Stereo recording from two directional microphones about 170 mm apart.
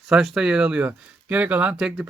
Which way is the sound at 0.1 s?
5° right (ahead or behind).